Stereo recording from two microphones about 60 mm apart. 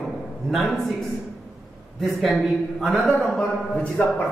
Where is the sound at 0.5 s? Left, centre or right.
Centre.